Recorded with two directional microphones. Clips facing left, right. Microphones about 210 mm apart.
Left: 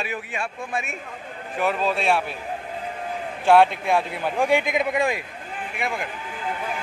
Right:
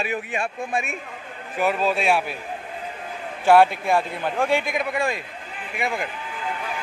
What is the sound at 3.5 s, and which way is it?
A man's voice, 5° right (ahead or behind).